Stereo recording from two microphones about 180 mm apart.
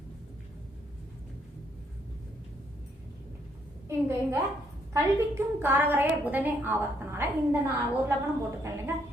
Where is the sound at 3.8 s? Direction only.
15° right (ahead or behind).